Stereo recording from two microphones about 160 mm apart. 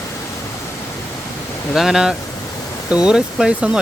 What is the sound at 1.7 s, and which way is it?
Speech, 5° right (ahead or behind).